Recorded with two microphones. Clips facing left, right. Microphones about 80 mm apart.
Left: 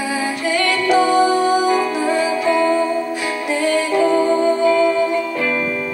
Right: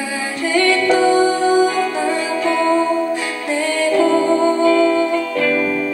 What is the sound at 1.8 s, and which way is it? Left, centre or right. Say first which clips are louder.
Music: left 1 dB; left.